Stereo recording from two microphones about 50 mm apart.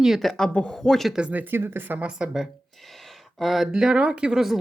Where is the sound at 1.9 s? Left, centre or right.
Right.